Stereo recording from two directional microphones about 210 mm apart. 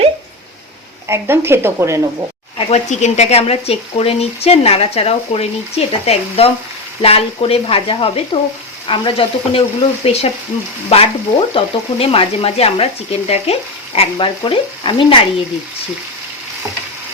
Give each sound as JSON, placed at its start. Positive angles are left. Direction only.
{"t": 1.0, "sound": "speech", "side_deg": -10}
{"t": 2.6, "sound": "speech", "side_deg": 30}